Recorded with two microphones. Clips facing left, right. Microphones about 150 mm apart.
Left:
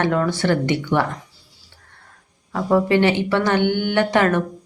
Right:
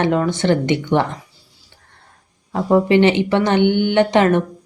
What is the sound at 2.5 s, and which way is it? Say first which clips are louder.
Speech: right 3 dB; 20° right (ahead or behind).